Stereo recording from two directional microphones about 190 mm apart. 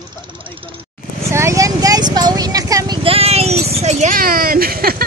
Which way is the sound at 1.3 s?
15° right (ahead or behind).